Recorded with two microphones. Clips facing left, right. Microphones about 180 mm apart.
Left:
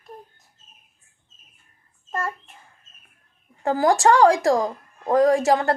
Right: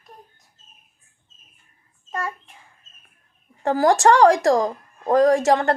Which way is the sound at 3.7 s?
15° left (ahead or behind).